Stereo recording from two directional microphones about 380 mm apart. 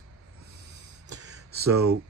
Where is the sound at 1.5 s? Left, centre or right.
Right.